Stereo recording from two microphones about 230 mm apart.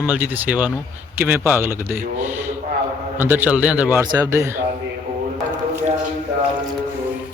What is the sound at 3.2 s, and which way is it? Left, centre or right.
Speech, centre.